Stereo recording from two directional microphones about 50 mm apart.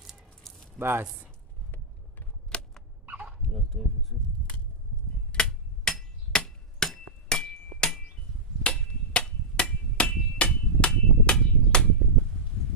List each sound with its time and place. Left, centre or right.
0.0 s squish: centre
0.8 s speech: right
2.5 s cap gun: centre
3.4 s fowl: centre
4.1 s a sound: centre
5.3 s hammer: left